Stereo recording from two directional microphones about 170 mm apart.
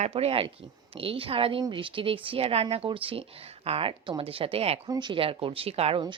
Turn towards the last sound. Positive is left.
turn(degrees=-30)  # may be behind; listen again after turning